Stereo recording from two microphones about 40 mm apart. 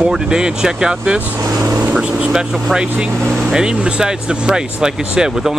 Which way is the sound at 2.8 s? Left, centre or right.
Right.